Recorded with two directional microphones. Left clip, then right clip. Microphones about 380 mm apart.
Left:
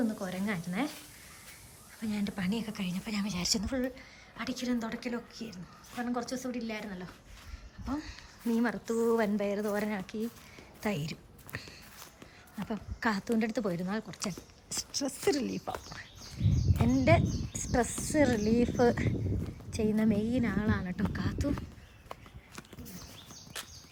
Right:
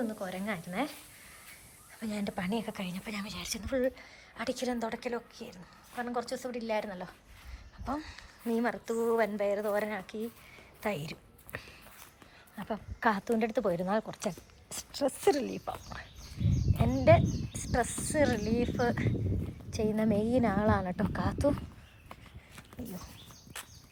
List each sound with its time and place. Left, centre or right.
0.2 s speech: centre
2.0 s speech: centre
10.8 s a sound: centre
12.5 s speech: centre
16.4 s speech: centre
16.7 s speech: centre
23.6 s a sound: centre